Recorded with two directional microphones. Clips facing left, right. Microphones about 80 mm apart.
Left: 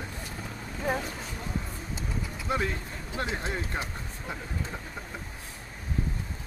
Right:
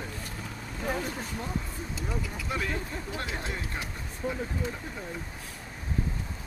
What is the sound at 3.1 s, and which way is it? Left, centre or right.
Speech, left.